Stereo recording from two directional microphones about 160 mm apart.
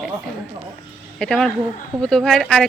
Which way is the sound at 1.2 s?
5° left (ahead or behind).